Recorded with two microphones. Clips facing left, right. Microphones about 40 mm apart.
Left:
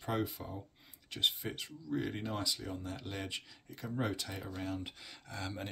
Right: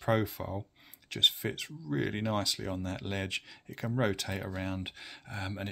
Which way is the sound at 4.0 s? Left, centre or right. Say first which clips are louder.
Right 6 dB; right.